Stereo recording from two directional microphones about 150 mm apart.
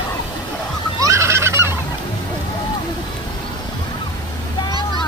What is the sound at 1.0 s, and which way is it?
Fowl, 20° right (ahead or behind).